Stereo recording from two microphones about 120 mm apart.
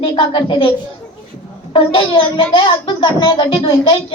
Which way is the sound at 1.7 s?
50° left (ahead or behind).